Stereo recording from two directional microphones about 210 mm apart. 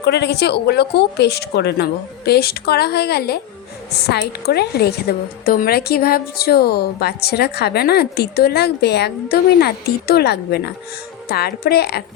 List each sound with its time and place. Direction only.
0.0 s a woman's voice: 50° left (ahead or behind)